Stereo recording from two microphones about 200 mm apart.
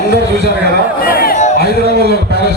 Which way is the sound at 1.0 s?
45° left (ahead or behind).